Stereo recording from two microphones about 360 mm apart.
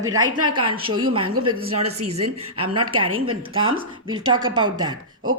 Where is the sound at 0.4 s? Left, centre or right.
Centre.